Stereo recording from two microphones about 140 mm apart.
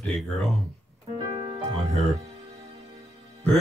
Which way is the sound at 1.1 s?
30° right (ahead or behind).